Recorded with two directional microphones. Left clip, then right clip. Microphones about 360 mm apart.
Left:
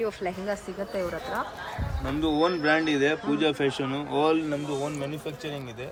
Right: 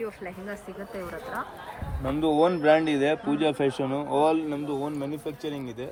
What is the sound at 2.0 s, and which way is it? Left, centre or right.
Speech, centre.